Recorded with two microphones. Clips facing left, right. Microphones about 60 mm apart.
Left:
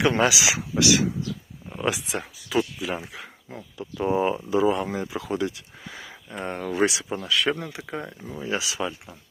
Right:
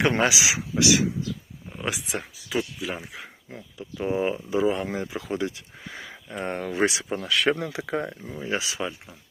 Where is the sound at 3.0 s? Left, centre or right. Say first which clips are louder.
Left 1 dB; centre.